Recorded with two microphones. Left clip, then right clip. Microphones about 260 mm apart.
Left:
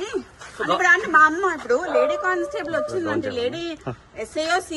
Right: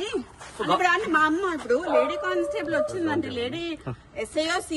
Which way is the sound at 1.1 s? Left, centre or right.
Centre.